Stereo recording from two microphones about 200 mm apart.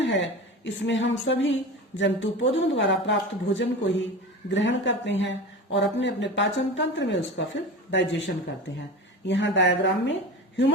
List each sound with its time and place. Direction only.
0.0 s a woman's voice: 65° left (ahead or behind)
9.2 s speech: 65° left (ahead or behind)